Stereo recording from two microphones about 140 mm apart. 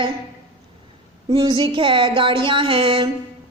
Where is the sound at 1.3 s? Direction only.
35° right (ahead or behind).